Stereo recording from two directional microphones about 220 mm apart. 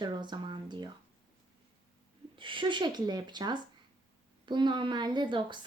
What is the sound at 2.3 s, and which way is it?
A woman's voice, 20° right (ahead or behind).